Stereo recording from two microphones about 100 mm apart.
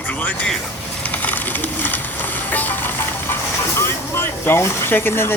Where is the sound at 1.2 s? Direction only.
15° left (ahead or behind).